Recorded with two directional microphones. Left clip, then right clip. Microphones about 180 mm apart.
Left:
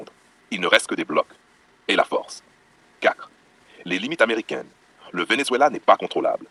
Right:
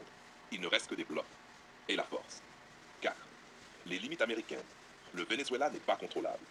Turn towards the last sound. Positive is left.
turn(degrees=45)  # may be behind; listen again after turning